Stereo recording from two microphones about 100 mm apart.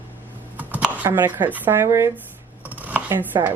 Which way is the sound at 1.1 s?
20° right (ahead or behind).